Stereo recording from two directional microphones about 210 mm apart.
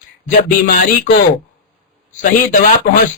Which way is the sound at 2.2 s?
40° left (ahead or behind).